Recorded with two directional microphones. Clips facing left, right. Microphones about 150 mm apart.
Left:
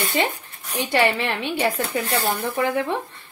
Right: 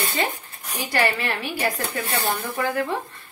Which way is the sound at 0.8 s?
25° left (ahead or behind).